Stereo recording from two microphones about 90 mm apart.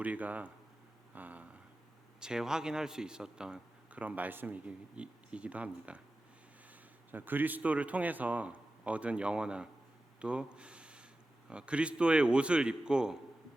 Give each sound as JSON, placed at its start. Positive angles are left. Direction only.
{"t": 0.0, "sound": "a man's voice", "side_deg": -15}
{"t": 1.1, "sound": "a sound", "side_deg": -20}
{"t": 2.2, "sound": "a man's voice", "side_deg": -5}
{"t": 7.1, "sound": "a man's voice", "side_deg": -20}